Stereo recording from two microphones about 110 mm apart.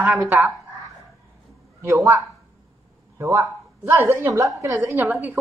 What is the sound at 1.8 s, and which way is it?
Speech, 25° right (ahead or behind).